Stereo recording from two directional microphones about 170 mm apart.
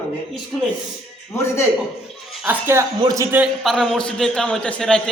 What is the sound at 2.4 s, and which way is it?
Speech, 10° right (ahead or behind).